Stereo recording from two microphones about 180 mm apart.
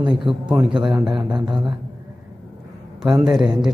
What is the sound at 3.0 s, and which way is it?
Speech, 5° right (ahead or behind).